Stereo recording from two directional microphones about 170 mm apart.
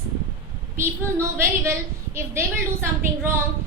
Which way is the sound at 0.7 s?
15° right (ahead or behind).